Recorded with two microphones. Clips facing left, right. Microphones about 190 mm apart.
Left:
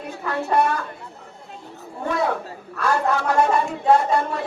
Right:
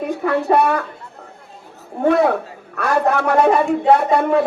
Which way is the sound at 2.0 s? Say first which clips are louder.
Right 8 dB; 60° right (ahead or behind).